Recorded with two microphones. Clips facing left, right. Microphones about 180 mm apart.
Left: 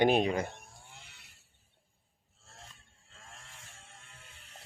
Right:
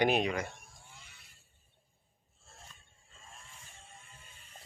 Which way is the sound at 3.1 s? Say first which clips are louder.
Left 1 dB; 75° left (ahead or behind).